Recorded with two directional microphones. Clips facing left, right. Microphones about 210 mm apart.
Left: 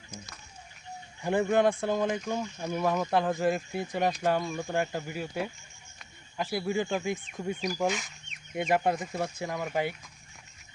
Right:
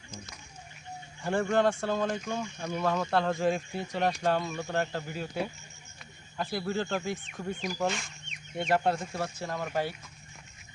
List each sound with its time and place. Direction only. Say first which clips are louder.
1.2 s speech: left 2 dB; 20° left (ahead or behind)
7.8 s speech: left 2 dB; 5° left (ahead or behind)